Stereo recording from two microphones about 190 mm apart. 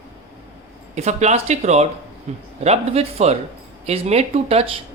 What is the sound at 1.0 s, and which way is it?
Speech, 35° right (ahead or behind).